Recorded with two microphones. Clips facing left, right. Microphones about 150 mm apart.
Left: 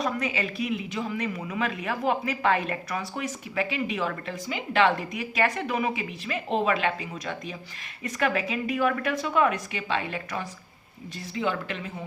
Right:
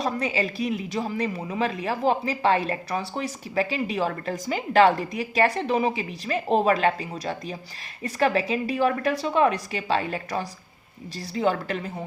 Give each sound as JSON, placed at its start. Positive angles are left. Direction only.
{"t": 0.0, "sound": "speech", "side_deg": -30}